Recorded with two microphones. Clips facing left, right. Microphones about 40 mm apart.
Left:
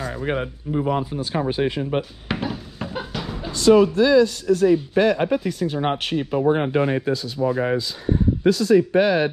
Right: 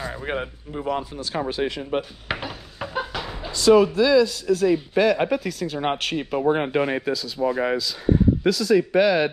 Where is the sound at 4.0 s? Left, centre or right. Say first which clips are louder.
Left 2 dB; right.